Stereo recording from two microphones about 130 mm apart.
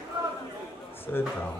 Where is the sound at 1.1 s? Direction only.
15° left (ahead or behind).